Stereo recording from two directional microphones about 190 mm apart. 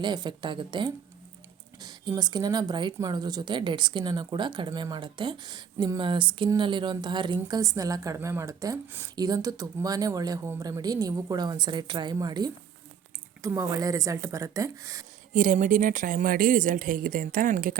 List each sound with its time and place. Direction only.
0.0 s a woman's voice: 25° right (ahead or behind)
15.3 s speech: 45° right (ahead or behind)